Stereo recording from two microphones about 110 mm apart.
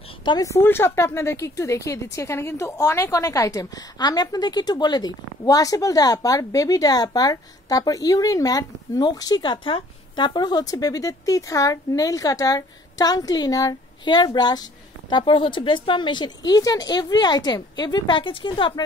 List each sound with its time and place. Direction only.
0.2 s a woman's voice: 40° left (ahead or behind)
0.5 s speech: 20° left (ahead or behind); by 18.7 s 50° left (ahead or behind)